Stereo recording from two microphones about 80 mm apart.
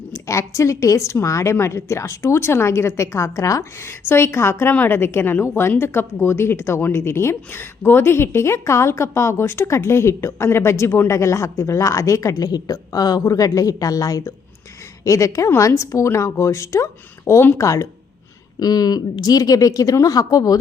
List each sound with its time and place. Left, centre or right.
0.1 s a woman's voice: left
18.6 s a woman's voice: left